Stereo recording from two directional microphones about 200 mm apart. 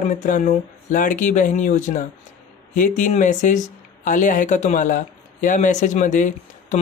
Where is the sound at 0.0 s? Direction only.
40° left (ahead or behind).